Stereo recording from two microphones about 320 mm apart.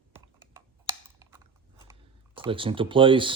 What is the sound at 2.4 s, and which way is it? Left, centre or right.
Speech, centre.